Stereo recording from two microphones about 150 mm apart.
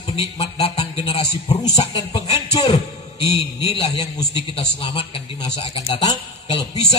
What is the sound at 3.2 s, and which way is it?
A man's voice, 40° left (ahead or behind).